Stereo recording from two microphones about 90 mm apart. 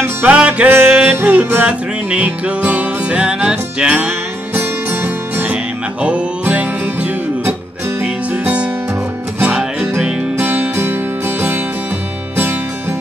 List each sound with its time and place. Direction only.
0.0 s music: 20° right (ahead or behind)
10.3 s music: 20° right (ahead or behind)